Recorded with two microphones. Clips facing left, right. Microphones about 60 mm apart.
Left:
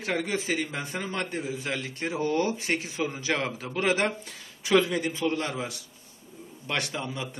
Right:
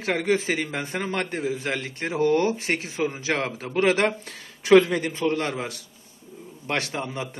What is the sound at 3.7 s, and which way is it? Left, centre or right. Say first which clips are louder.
A man's voice: right 5 dB; right.